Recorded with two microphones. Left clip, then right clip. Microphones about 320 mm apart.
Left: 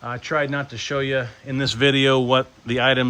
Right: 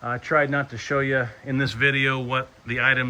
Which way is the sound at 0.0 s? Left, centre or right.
Centre.